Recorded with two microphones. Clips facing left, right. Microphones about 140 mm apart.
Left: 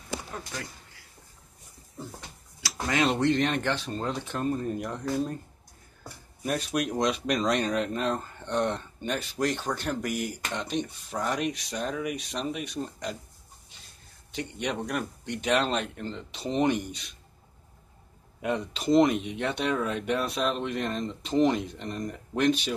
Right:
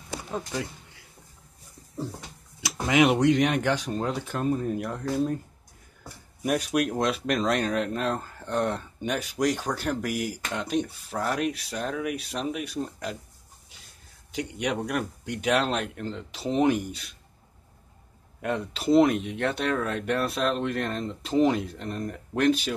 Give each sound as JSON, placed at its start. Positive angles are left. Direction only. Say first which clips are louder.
{"t": 0.3, "sound": "speech", "louder": "right 7 dB", "side_deg": -20}
{"t": 2.6, "sound": "speech", "louder": "right 5 dB", "side_deg": -15}
{"t": 6.4, "sound": "speech", "louder": "right 4 dB", "side_deg": -10}
{"t": 14.3, "sound": "speech", "louder": "right 3 dB", "side_deg": -10}
{"t": 18.4, "sound": "speech", "louder": "right 1 dB", "side_deg": 0}